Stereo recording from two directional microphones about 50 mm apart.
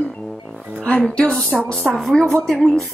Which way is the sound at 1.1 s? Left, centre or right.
Left.